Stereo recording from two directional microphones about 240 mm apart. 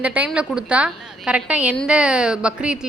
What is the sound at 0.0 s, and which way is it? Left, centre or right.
A woman's voice, centre.